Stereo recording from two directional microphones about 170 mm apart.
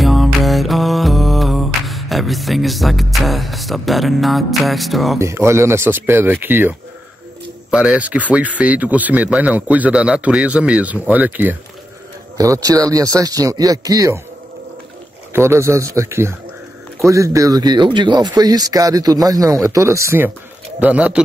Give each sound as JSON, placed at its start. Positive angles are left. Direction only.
{"t": 0.0, "sound": "music", "side_deg": 0}
{"t": 5.2, "sound": "speech", "side_deg": -15}
{"t": 7.7, "sound": "speech", "side_deg": -5}
{"t": 15.3, "sound": "speech", "side_deg": -15}